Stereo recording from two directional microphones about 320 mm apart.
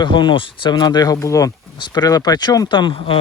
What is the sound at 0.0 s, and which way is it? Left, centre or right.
Speech, centre.